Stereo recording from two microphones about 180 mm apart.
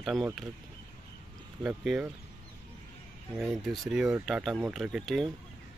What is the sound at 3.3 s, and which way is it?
Speech, centre (ahead or behind).